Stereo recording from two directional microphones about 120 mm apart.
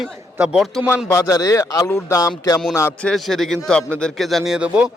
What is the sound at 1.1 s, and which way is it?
A man's voice, 30° left (ahead or behind).